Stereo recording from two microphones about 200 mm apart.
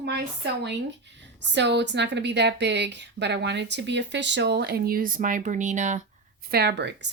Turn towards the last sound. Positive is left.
turn(degrees=-60)  # may be behind; listen again after turning